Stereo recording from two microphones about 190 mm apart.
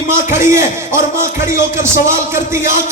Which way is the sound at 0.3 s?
15° right (ahead or behind).